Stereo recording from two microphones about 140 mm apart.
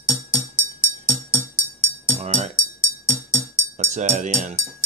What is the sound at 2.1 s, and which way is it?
Music, 50° right (ahead or behind).